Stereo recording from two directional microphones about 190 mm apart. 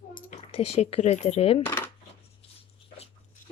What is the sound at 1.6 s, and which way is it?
Speech, 10° left (ahead or behind).